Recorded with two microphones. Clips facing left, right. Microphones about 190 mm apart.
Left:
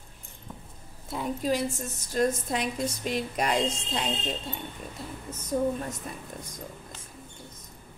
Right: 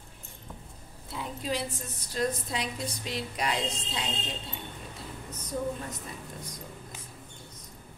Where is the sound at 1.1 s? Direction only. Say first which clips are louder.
Left 5 dB; 45° left (ahead or behind).